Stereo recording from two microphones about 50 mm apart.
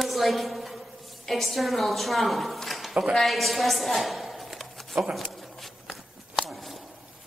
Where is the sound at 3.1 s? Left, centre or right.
Centre.